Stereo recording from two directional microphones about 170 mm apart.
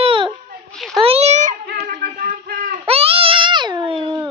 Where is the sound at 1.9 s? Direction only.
50° right (ahead or behind).